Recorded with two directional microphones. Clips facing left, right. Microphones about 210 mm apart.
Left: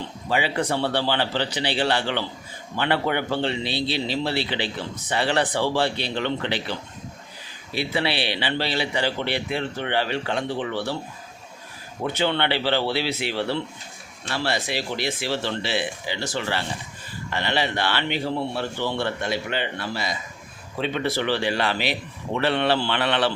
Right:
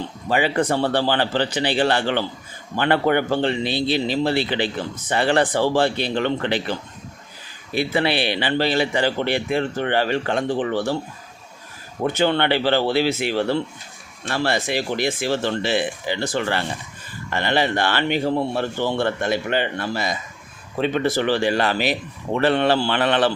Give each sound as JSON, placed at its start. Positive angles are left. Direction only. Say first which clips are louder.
{"t": 0.3, "sound": "a man's voice", "louder": "right 4 dB", "side_deg": -50}
{"t": 12.0, "sound": "a man's voice", "louder": "right 4 dB", "side_deg": -45}